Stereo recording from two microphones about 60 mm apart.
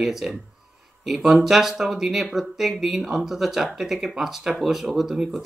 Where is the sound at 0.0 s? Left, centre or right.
Centre.